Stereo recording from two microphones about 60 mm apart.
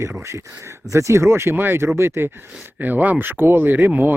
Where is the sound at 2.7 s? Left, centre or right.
Right.